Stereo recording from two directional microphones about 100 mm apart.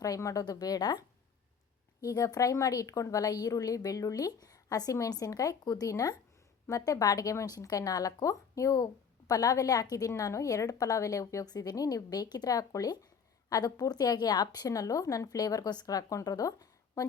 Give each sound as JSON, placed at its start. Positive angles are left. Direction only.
{"t": 0.0, "sound": "speech", "side_deg": 35}